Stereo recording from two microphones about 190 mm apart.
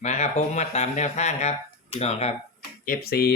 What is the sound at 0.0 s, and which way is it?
Speech, 35° left (ahead or behind).